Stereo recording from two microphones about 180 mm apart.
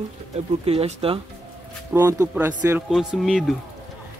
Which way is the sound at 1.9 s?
15° right (ahead or behind).